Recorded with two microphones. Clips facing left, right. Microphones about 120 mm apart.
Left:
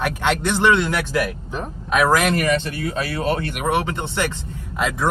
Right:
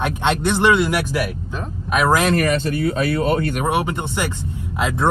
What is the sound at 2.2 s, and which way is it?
Speech, 35° right (ahead or behind).